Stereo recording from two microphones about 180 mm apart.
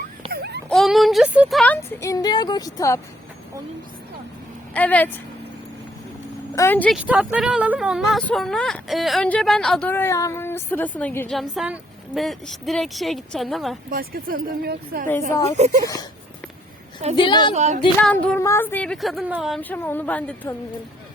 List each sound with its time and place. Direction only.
0.3 s baby cry: 65° right (ahead or behind)
0.7 s speech: centre (ahead or behind); by 3.0 s 20° left (ahead or behind)
4.7 s a woman's voice: 10° left (ahead or behind)
6.6 s a woman's voice: 10° left (ahead or behind)
6.9 s speech: 5° right (ahead or behind); by 11.3 s 10° left (ahead or behind)
11.3 s speech: centre (ahead or behind)
13.9 s speech: 55° right (ahead or behind)
15.6 s speech: 40° right (ahead or behind)
17.2 s a woman's voice: 25° left (ahead or behind)
17.5 s speech: 40° right (ahead or behind)
18.0 s speech: 10° left (ahead or behind)
19.6 s a woman's voice: 10° left (ahead or behind)